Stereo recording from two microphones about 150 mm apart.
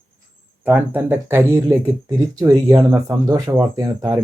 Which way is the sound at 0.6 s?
10° right (ahead or behind).